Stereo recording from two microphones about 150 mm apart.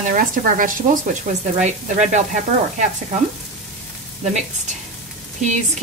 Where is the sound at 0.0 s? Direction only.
65° right (ahead or behind).